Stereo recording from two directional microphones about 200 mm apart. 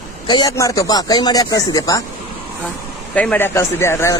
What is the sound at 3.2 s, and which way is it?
Speech, 10° left (ahead or behind).